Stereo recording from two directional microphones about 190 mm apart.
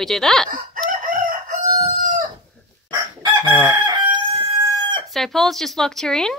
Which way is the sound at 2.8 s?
25° right (ahead or behind).